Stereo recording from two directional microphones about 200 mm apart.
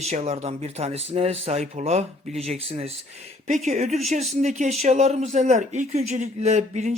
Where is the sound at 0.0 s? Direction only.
35° right (ahead or behind).